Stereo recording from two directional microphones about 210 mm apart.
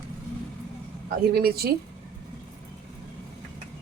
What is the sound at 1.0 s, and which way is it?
Speech, 45° right (ahead or behind).